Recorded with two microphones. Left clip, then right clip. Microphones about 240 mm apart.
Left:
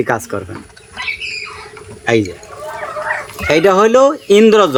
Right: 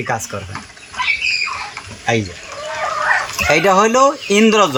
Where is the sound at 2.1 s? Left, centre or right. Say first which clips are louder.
Left 4 dB; centre.